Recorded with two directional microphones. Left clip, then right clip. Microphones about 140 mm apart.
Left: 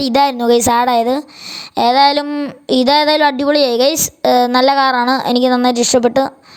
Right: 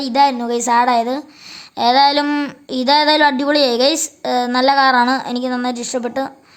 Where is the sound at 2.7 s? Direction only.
55° left (ahead or behind).